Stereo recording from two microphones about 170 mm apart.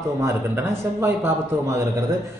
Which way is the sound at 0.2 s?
15° right (ahead or behind).